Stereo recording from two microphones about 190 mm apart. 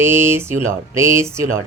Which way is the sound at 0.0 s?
10° right (ahead or behind).